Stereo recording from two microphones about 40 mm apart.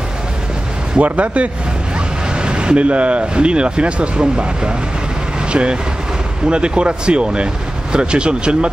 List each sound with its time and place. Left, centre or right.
1.0 s speech: right
2.4 s speech: right